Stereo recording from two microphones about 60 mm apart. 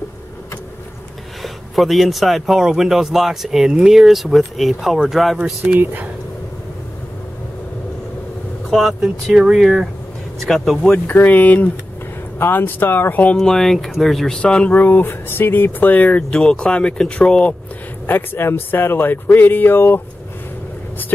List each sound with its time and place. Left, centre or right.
1.4 s speech: centre
5.4 s speech: right
8.6 s speech: centre
9.3 s speech: centre
10.4 s speech: centre
11.1 s speech: left
13.4 s speech: centre
14.8 s speech: left
16.3 s speech: centre
18.0 s speech: left